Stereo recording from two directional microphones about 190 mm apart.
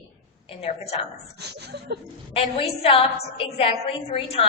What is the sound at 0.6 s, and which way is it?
Speech, 35° left (ahead or behind).